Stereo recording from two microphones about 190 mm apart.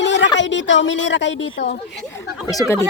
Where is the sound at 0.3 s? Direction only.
75° left (ahead or behind).